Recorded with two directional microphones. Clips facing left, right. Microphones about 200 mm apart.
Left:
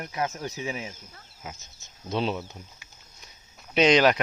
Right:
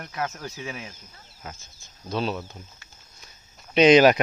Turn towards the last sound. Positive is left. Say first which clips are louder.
# right 5 dB
turn(degrees=-10)  # may be behind; listen again after turning